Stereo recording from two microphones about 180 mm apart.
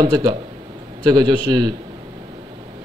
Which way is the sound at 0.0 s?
25° right (ahead or behind).